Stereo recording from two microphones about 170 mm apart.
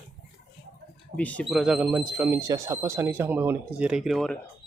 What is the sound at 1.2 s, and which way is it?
Speech, 10° left (ahead or behind).